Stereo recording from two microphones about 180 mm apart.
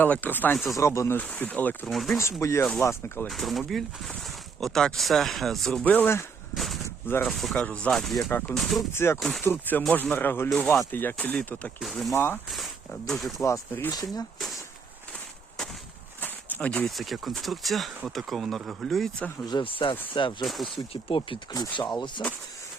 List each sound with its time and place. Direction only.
0.0 s speech: 10° left (ahead or behind)
2.4 s speech: 15° left (ahead or behind)
3.2 s speech: centre (ahead or behind)
6.5 s a sound: centre (ahead or behind)
7.1 s speech: 10° left (ahead or behind)
8.9 s speech: 15° left (ahead or behind)
12.1 s speech: 10° left (ahead or behind)
12.5 s speech: centre (ahead or behind)
13.4 s speech: 15° left (ahead or behind)
16.2 s speech: 10° left (ahead or behind)
19.5 s speech: 25° left (ahead or behind)
20.4 s speech: centre (ahead or behind)
20.9 s speech: 30° left (ahead or behind)